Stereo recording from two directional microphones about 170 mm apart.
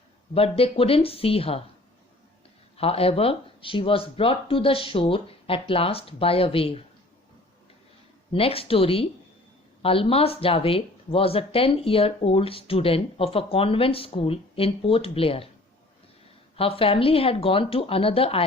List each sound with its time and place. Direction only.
0.3 s speech: 35° left (ahead or behind)
2.7 s speech: 35° left (ahead or behind)
8.3 s speech: 35° left (ahead or behind)
16.6 s speech: 35° left (ahead or behind)